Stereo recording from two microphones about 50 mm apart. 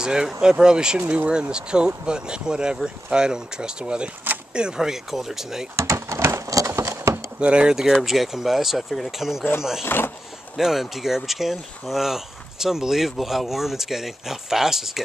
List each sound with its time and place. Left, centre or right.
0.0 s speech: centre
5.8 s a sound: right
7.3 s speech: right
9.8 s speech: left
10.6 s speech: centre